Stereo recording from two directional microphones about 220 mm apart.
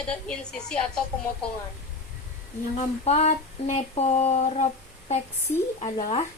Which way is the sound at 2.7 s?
30° left (ahead or behind).